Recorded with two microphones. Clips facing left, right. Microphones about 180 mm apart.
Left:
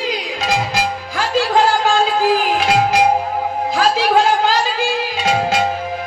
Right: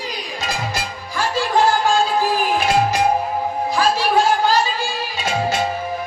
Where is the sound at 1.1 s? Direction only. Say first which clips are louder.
Left 2 dB; 90° left.